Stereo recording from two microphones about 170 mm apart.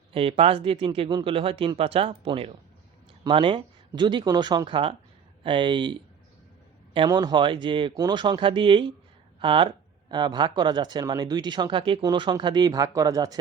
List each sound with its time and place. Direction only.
0.1 s speech: 35° right (ahead or behind)